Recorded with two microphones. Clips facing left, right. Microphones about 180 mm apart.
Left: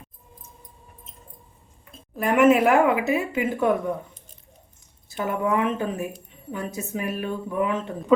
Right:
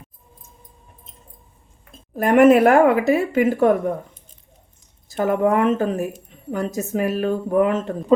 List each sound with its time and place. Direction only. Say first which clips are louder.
1.8 s a sound: right 5 dB; 50° right (ahead or behind)
2.4 s speech: right 5 dB; 55° right (ahead or behind)
5.1 s speech: right 6 dB; 45° right (ahead or behind)